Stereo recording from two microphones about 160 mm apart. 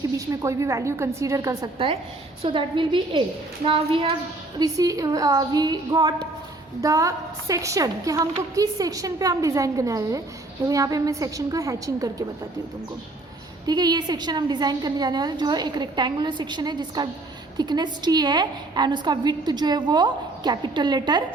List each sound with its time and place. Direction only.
0.4 s a woman's voice: 20° right (ahead or behind)
2.4 s a woman's voice: 30° right (ahead or behind)
4.6 s a woman's voice: 20° right (ahead or behind)
13.7 s a woman's voice: 25° right (ahead or behind)